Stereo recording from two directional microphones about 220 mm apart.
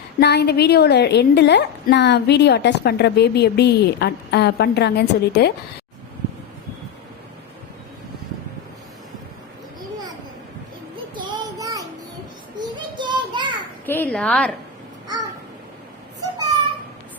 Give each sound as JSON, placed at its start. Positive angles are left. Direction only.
{"t": 0.2, "sound": "a woman's voice", "side_deg": 50}
{"t": 11.1, "sound": "child singing", "side_deg": -20}
{"t": 13.8, "sound": "a sound", "side_deg": 10}